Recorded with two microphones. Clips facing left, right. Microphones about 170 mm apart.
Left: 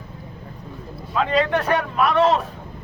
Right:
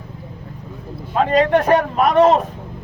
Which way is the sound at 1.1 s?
45° right (ahead or behind).